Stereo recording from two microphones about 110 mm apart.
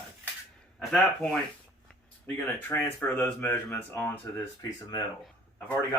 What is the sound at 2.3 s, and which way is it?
Speech, 20° left (ahead or behind).